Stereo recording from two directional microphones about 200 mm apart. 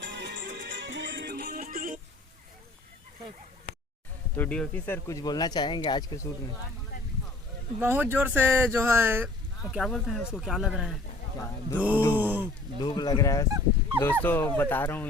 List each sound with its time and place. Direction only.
0.0 s music: 60° right (ahead or behind); by 2.0 s 40° right (ahead or behind)
4.4 s speech: 5° left (ahead or behind)
7.8 s speech: 10° right (ahead or behind)
12.8 s speech: 20° left (ahead or behind)